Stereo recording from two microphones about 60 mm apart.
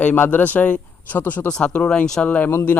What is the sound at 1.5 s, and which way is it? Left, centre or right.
Speech, centre.